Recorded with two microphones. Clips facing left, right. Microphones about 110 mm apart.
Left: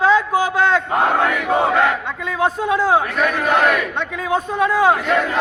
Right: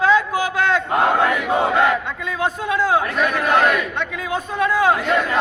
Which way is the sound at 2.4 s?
25° left (ahead or behind).